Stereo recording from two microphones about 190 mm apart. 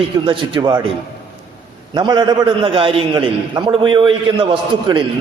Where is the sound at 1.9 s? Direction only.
20° right (ahead or behind).